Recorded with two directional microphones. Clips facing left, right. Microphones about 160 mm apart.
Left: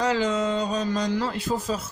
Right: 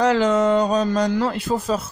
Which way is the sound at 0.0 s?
60° right (ahead or behind).